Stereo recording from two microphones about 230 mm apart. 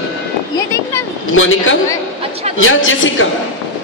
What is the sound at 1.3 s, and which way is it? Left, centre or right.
A man's voice, left.